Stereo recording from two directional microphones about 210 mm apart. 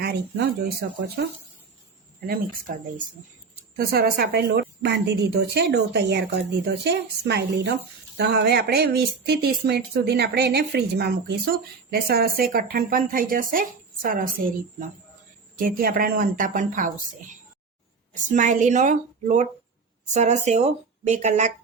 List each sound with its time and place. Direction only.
0.0 s speech: 50° right (ahead or behind)
2.2 s speech: 45° right (ahead or behind)
3.8 s speech: 45° right (ahead or behind)
15.5 s a woman's voice: 45° right (ahead or behind)